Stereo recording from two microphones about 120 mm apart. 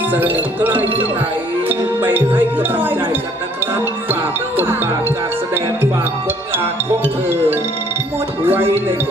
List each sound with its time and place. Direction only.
0.1 s speech: 15° right (ahead or behind)
1.6 s music: 15° right (ahead or behind)
7.3 s music: 20° right (ahead or behind)